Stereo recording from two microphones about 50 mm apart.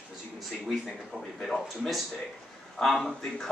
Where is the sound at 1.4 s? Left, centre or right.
Centre.